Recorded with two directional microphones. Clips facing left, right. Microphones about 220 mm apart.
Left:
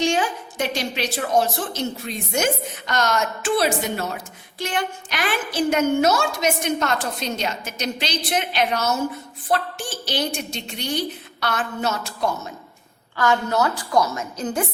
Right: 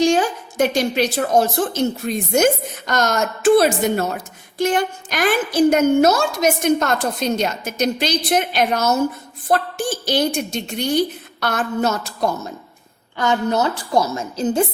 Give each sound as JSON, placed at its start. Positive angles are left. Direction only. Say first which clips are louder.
{"t": 0.0, "sound": "a woman's voice", "louder": "right 5 dB", "side_deg": -40}
{"t": 13.1, "sound": "a woman's voice", "louder": "right 2 dB", "side_deg": -20}